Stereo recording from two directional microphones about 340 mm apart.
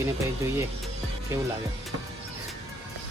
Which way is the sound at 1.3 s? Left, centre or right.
Centre.